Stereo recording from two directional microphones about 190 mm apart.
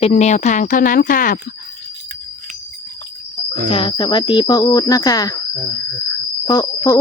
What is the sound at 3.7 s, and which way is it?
Speech, 25° left (ahead or behind).